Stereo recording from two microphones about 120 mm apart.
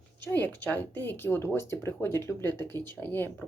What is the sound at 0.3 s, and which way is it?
Speech, 15° left (ahead or behind).